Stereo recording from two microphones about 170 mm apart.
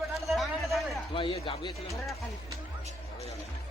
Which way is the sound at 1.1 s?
30° left (ahead or behind).